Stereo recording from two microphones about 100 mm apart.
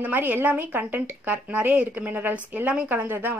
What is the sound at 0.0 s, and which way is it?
A woman's voice, 15° right (ahead or behind).